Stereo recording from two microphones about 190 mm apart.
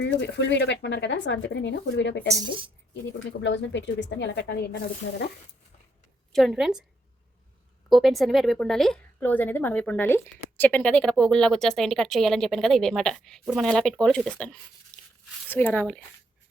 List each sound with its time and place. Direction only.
0.0 s speech: 65° left (ahead or behind)
6.3 s speech: centre (ahead or behind)
7.9 s speech: centre (ahead or behind)